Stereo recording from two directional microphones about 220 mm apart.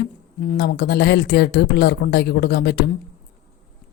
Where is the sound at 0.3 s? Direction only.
45° left (ahead or behind).